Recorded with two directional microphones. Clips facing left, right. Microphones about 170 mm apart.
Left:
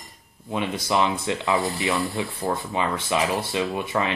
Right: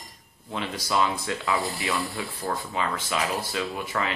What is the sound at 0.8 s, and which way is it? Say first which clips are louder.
Speech: left 2 dB; 20° left (ahead or behind).